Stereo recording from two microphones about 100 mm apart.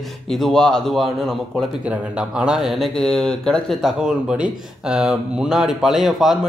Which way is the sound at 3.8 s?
5° right (ahead or behind).